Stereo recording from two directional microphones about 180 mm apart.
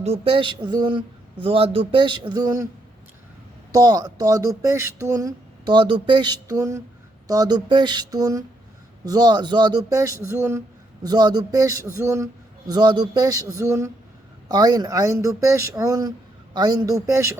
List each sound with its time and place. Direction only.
0.0 s speech: 30° right (ahead or behind)
3.7 s speech: 20° right (ahead or behind)